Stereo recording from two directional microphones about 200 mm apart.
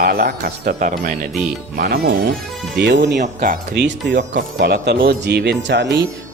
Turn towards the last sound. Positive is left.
turn(degrees=-60)  # may be behind; listen again after turning